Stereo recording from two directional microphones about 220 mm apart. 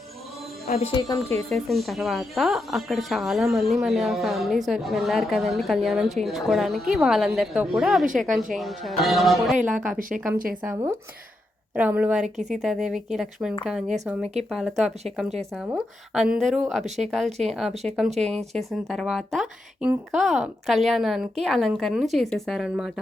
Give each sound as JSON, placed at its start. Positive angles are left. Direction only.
{"t": 0.7, "sound": "speech", "side_deg": 25}
{"t": 1.5, "sound": "speech", "side_deg": 0}
{"t": 10.3, "sound": "speech", "side_deg": -40}
{"t": 10.6, "sound": "speech", "side_deg": -10}